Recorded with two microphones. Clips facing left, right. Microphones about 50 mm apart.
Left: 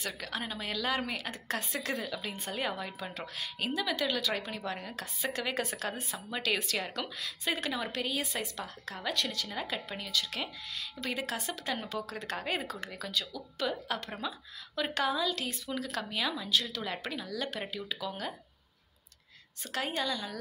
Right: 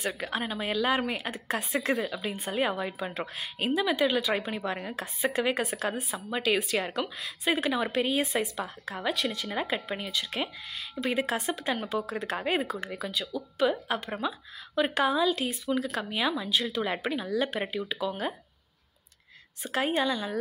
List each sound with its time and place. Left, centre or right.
0.1 s a woman's voice: right
13.3 s a woman's voice: right
19.6 s speech: right